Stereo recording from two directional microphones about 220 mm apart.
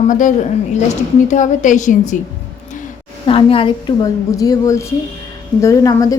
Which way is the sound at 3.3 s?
25° left (ahead or behind).